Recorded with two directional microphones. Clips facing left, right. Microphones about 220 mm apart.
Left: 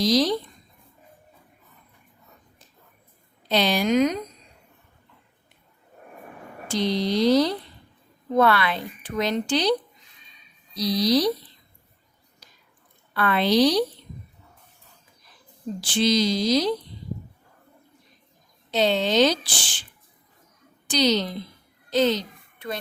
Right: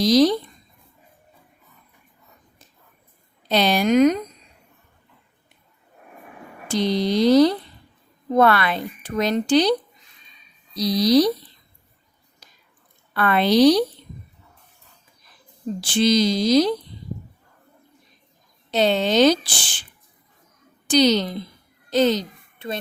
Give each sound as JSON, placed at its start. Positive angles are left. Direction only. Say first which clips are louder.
{"t": 0.0, "sound": "speech", "louder": "right 5 dB", "side_deg": -50}
{"t": 3.5, "sound": "speech", "louder": "right 3 dB", "side_deg": -50}
{"t": 6.7, "sound": "speech", "louder": "right 3 dB", "side_deg": -50}
{"t": 10.8, "sound": "speech", "louder": "right 4 dB", "side_deg": -45}
{"t": 13.1, "sound": "speech", "louder": "right 3 dB", "side_deg": -50}
{"t": 15.8, "sound": "speech", "louder": "right 3 dB", "side_deg": -50}
{"t": 18.7, "sound": "speech", "louder": "right 2 dB", "side_deg": -50}
{"t": 20.8, "sound": "a woman's voice", "louder": "right 5 dB", "side_deg": -50}
{"t": 22.5, "sound": "a child's voice", "louder": "right 2 dB", "side_deg": -25}